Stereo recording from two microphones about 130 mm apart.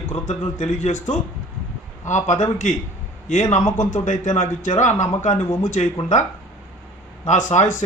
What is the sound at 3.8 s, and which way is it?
A man's voice, 70° left (ahead or behind).